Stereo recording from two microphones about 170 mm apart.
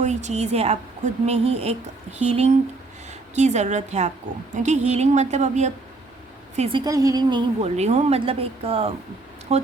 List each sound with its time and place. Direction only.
0.0 s a woman's voice: 45° right (ahead or behind)
6.7 s a woman's voice: 20° right (ahead or behind)
7.8 s a woman's voice: 40° right (ahead or behind)